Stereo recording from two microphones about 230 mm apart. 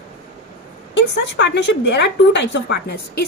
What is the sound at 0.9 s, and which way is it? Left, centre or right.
A woman's voice, left.